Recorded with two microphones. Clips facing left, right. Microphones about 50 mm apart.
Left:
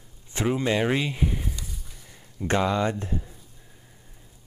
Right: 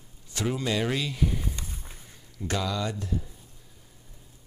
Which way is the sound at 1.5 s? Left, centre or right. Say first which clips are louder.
Even; right.